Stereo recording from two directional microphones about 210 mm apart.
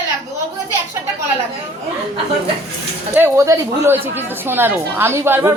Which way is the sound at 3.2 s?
15° right (ahead or behind).